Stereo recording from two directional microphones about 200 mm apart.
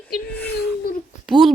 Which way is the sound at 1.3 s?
Centre (ahead or behind).